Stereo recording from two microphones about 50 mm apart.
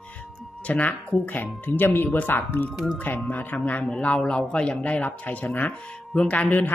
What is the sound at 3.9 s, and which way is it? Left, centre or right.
Speech, left.